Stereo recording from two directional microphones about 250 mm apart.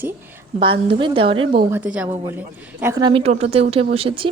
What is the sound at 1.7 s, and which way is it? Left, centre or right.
A woman's voice, centre.